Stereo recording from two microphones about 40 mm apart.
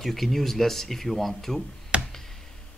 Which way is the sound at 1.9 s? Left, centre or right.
Right.